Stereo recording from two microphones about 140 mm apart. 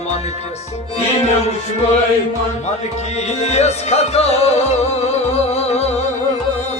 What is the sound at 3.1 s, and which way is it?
Music, 50° left (ahead or behind).